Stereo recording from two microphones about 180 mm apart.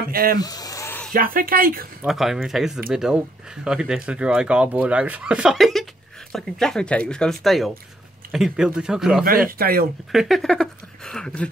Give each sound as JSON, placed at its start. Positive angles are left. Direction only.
{"t": 0.1, "sound": "speech", "side_deg": -55}
{"t": 0.4, "sound": "a sound", "side_deg": 20}
{"t": 1.1, "sound": "speech", "side_deg": -50}
{"t": 2.0, "sound": "speech", "side_deg": 0}
{"t": 9.2, "sound": "speech", "side_deg": -55}
{"t": 10.1, "sound": "speech", "side_deg": 0}